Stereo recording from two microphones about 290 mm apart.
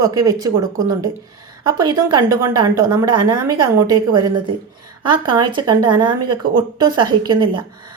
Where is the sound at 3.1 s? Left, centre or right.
Right.